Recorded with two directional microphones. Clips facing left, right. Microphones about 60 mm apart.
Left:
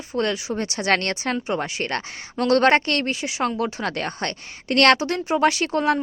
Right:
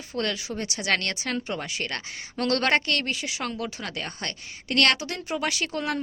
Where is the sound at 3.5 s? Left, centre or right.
Left.